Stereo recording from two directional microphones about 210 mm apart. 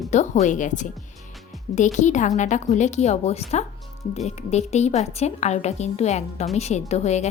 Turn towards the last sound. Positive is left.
turn(degrees=30)  # may be behind; listen again after turning